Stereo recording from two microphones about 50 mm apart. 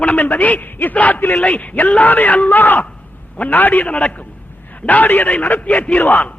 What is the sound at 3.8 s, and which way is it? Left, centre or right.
A man's voice, left.